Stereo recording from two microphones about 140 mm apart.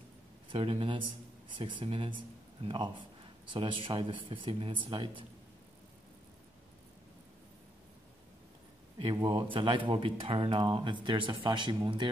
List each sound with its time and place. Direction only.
0.5 s speech: 40° right (ahead or behind)
8.9 s speech: 35° right (ahead or behind)